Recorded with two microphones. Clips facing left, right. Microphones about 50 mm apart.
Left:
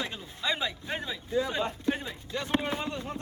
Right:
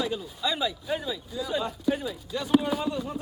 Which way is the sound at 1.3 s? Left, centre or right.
Left.